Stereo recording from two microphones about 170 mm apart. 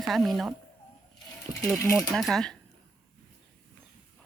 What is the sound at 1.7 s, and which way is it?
Speech, 15° left (ahead or behind).